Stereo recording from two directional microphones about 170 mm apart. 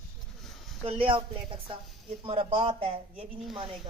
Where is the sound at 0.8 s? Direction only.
30° right (ahead or behind).